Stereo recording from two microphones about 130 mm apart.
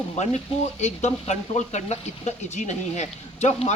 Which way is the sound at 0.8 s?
60° left (ahead or behind).